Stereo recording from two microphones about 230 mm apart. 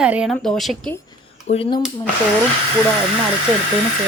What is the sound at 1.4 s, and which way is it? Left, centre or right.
Speech, left.